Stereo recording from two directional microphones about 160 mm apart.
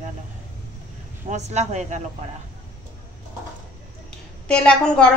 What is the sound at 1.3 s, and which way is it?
Speech, 45° right (ahead or behind).